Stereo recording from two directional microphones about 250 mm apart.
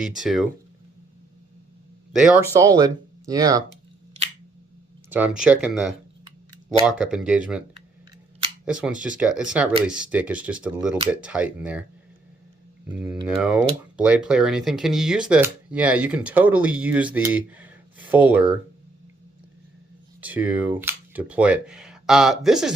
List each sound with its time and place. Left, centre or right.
0.0 s speech: centre
2.1 s speech: centre
5.0 s speech: centre
8.6 s speech: centre
13.2 s speech: centre
20.2 s speech: centre